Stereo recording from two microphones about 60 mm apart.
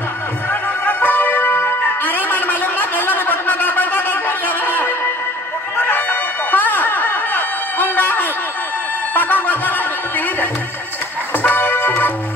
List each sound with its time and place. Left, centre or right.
0.5 s music: left